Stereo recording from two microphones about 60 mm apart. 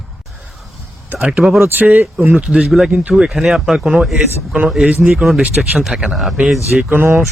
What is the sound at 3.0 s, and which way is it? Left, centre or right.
Speech, right.